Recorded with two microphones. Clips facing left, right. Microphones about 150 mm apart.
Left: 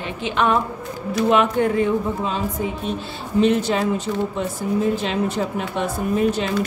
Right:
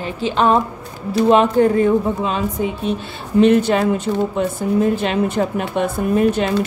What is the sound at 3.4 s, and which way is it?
Speech, 60° right (ahead or behind).